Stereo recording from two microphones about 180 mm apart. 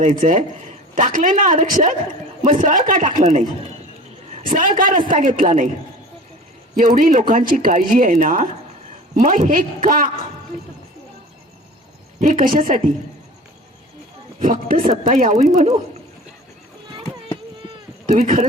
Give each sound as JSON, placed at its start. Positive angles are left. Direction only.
{"t": 0.0, "sound": "speech", "side_deg": -40}
{"t": 4.4, "sound": "speech", "side_deg": -45}
{"t": 6.7, "sound": "speech", "side_deg": -50}
{"t": 12.2, "sound": "speech", "side_deg": -45}
{"t": 14.3, "sound": "speech", "side_deg": -50}
{"t": 18.0, "sound": "speech", "side_deg": -45}